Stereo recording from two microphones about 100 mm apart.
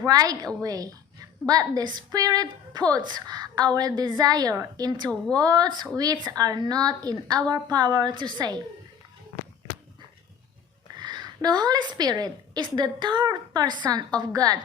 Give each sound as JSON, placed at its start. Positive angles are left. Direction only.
{"t": 0.0, "sound": "a woman's voice", "side_deg": -40}
{"t": 11.0, "sound": "a woman's voice", "side_deg": -45}